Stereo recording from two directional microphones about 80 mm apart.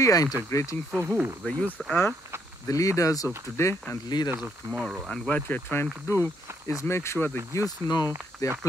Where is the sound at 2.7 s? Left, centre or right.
Left.